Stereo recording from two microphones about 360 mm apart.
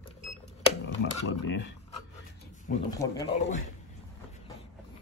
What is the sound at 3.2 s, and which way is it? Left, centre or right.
Speech, left.